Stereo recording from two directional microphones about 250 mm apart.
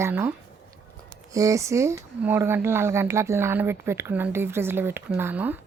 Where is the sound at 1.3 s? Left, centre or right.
Centre.